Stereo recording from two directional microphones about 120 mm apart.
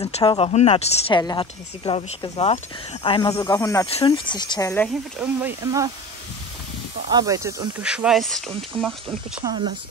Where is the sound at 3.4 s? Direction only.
30° left (ahead or behind).